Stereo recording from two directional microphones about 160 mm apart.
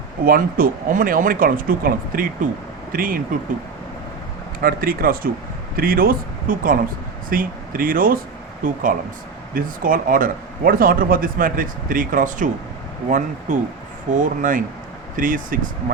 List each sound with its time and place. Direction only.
0.3 s speech: 60° right (ahead or behind)
4.6 s speech: 65° right (ahead or behind)